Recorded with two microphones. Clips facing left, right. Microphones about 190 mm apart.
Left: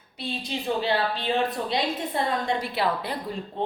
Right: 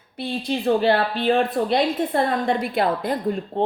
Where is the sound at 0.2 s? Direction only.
55° right (ahead or behind).